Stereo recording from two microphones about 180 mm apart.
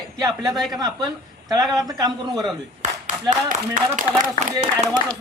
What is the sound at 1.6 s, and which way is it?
Speech, centre (ahead or behind).